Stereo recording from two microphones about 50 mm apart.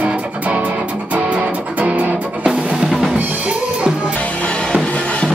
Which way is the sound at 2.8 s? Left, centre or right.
Centre.